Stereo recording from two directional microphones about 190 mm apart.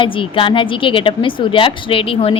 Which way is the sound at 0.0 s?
25° left (ahead or behind).